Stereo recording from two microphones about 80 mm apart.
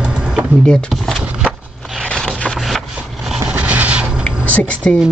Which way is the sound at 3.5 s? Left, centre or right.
Centre.